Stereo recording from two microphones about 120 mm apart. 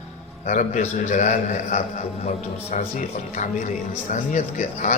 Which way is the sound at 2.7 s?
90° left.